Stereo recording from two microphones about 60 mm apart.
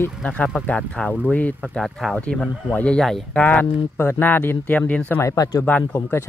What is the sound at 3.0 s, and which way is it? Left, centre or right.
Speech, centre.